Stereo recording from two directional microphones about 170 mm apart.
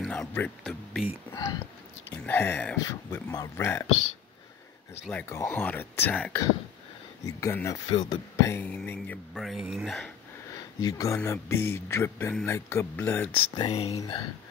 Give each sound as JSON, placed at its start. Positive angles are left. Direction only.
{"t": 0.0, "sound": "speech", "side_deg": 5}
{"t": 1.3, "sound": "speech", "side_deg": 20}
{"t": 5.3, "sound": "speech", "side_deg": 15}
{"t": 7.2, "sound": "speech", "side_deg": 20}
{"t": 7.9, "sound": "speech", "side_deg": 30}
{"t": 8.4, "sound": "speech", "side_deg": 15}
{"t": 10.5, "sound": "a sound", "side_deg": 20}
{"t": 11.1, "sound": "speech", "side_deg": 15}
{"t": 13.7, "sound": "speech", "side_deg": 40}
{"t": 13.9, "sound": "speech", "side_deg": 25}